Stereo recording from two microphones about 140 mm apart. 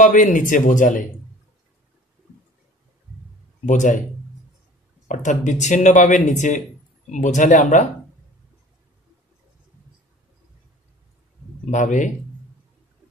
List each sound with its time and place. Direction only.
0.0 s speech: 65° left (ahead or behind)
3.6 s speech: 60° left (ahead or behind)
5.0 s speech: 65° left (ahead or behind)
11.7 s speech: 65° left (ahead or behind)